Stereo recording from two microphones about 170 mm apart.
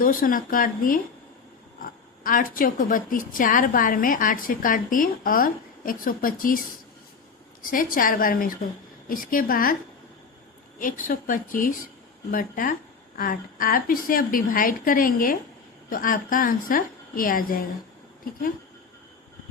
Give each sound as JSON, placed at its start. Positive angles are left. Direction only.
{"t": 0.0, "sound": "a woman's voice", "side_deg": 55}
{"t": 2.2, "sound": "a woman's voice", "side_deg": 55}
{"t": 7.6, "sound": "a woman's voice", "side_deg": 55}
{"t": 10.8, "sound": "a woman's voice", "side_deg": 50}